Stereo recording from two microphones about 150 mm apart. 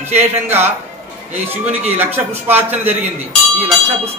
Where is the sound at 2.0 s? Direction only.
15° right (ahead or behind).